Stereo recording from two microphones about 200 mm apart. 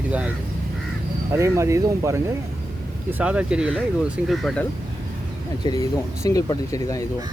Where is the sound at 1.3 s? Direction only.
15° right (ahead or behind).